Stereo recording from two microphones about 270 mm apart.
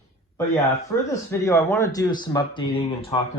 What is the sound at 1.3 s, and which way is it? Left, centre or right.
Speech, centre.